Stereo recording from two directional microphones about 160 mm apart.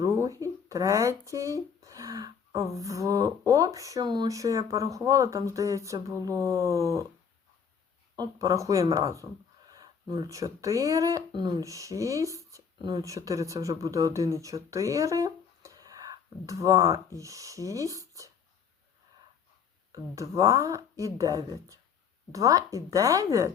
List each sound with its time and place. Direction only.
0.0 s speech: 20° right (ahead or behind)
8.1 s speech: 25° right (ahead or behind)
19.9 s speech: 20° right (ahead or behind)